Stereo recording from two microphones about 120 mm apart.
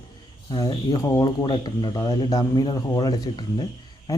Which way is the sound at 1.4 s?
40° left (ahead or behind).